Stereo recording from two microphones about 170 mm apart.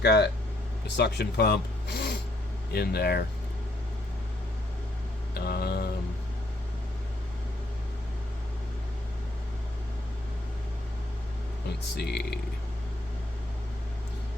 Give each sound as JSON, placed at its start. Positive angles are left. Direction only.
{"t": 0.0, "sound": "speech", "side_deg": 75}
{"t": 5.3, "sound": "a sound", "side_deg": 70}
{"t": 11.9, "sound": "speech", "side_deg": 75}